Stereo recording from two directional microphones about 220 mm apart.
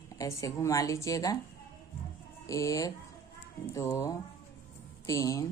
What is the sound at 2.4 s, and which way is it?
A woman's voice, 15° left (ahead or behind).